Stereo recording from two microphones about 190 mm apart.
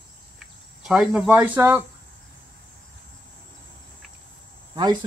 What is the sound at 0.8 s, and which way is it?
Speech, 5° right (ahead or behind).